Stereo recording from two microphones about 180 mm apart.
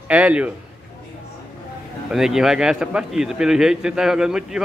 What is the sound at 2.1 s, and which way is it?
A man's voice, centre (ahead or behind).